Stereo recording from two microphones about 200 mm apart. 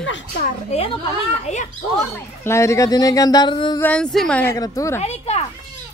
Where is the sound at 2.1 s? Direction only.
15° left (ahead or behind).